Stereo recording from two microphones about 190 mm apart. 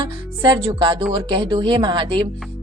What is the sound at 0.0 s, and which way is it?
A woman's voice, 25° right (ahead or behind).